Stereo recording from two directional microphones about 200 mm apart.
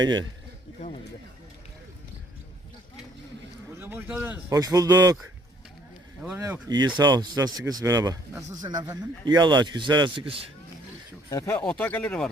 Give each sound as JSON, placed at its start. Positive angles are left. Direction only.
{"t": 0.0, "sound": "speech", "side_deg": -20}
{"t": 3.8, "sound": "speech", "side_deg": -10}
{"t": 6.2, "sound": "speech", "side_deg": -10}
{"t": 6.7, "sound": "speech", "side_deg": -20}
{"t": 11.3, "sound": "speech", "side_deg": 15}